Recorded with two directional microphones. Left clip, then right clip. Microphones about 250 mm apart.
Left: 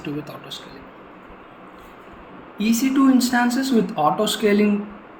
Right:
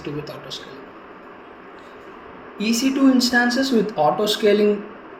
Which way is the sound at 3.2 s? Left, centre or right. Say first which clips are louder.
Right 2 dB; left.